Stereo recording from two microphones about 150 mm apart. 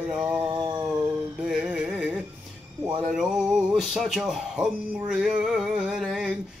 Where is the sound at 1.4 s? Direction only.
5° right (ahead or behind).